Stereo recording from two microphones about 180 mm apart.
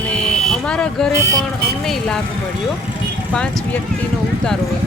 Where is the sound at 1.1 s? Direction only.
15° right (ahead or behind).